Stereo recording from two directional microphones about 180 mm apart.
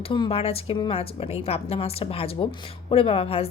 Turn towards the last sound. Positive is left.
turn(degrees=30)  # may be behind; listen again after turning